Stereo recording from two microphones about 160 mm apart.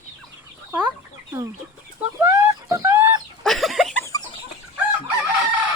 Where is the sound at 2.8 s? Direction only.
15° right (ahead or behind).